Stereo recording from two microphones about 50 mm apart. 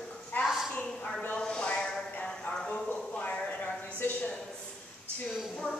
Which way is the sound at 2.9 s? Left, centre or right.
Left.